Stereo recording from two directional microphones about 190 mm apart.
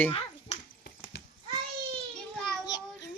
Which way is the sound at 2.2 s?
5° left (ahead or behind).